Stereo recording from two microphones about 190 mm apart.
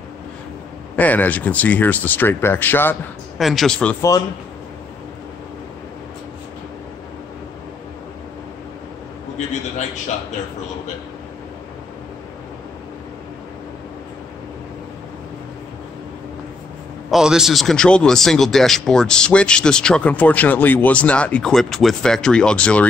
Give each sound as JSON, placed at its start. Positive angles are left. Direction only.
{"t": 0.9, "sound": "speech", "side_deg": 10}
{"t": 3.3, "sound": "speech", "side_deg": 0}
{"t": 17.1, "sound": "speech", "side_deg": -5}